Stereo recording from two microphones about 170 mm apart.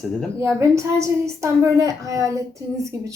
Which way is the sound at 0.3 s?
15° right (ahead or behind).